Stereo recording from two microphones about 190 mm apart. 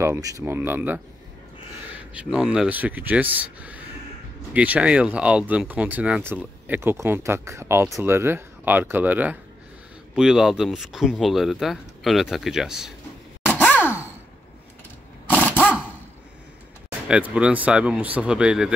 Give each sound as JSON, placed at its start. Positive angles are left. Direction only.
{"t": 0.0, "sound": "speech", "side_deg": -15}
{"t": 2.1, "sound": "speech", "side_deg": -5}
{"t": 13.7, "sound": "gasp", "side_deg": 10}
{"t": 17.1, "sound": "speech", "side_deg": -5}